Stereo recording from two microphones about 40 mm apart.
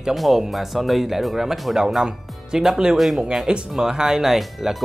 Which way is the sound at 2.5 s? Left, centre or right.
Centre.